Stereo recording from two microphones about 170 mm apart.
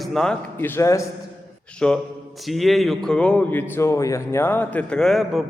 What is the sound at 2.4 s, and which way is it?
A man's voice, centre (ahead or behind).